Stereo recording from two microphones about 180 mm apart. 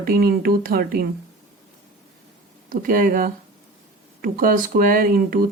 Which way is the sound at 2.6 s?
50° right (ahead or behind).